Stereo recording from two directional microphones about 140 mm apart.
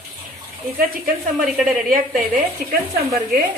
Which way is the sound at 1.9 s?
85° right.